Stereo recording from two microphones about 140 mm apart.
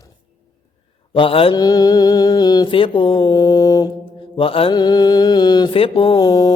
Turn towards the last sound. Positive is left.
turn(degrees=25)  # may be behind; listen again after turning